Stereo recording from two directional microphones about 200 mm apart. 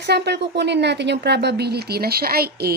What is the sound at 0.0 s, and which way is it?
A woman's voice, 55° right (ahead or behind).